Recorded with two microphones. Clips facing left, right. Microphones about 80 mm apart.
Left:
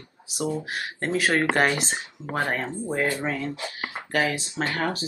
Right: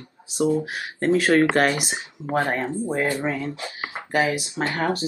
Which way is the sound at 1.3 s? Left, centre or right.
Centre.